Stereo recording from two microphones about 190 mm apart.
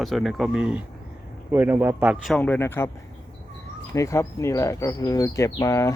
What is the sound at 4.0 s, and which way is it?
Speech, 15° left (ahead or behind).